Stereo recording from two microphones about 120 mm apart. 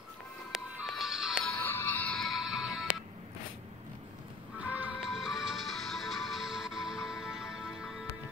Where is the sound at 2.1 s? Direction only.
Centre (ahead or behind).